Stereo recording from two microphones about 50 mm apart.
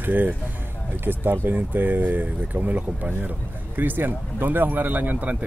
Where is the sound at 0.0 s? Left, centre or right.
Right.